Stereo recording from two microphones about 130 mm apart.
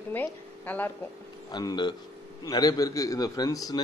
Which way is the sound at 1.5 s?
35° left (ahead or behind).